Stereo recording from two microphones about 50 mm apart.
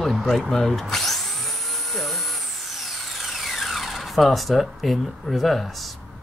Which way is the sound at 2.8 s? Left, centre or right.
Centre.